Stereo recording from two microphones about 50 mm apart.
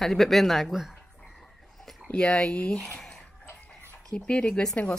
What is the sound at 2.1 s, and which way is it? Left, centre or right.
Speech, centre.